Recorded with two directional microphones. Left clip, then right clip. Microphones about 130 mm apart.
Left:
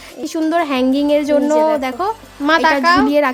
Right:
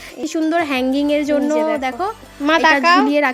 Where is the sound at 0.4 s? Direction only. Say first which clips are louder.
Left 2 dB; 10° right (ahead or behind).